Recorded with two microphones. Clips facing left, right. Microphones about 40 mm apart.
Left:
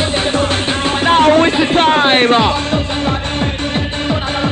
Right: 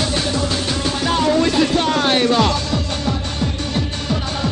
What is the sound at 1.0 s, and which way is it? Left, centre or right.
Music, left.